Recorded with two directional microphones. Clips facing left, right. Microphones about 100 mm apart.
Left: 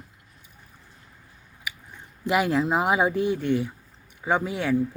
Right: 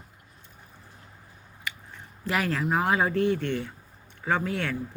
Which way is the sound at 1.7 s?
15° left (ahead or behind).